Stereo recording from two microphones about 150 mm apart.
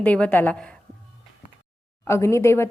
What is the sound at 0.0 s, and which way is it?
Speech, 10° left (ahead or behind).